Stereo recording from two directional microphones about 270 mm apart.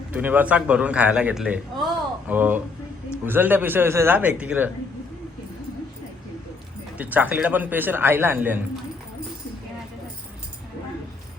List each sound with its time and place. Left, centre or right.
0.1 s a man's voice: centre
6.9 s a man's voice: centre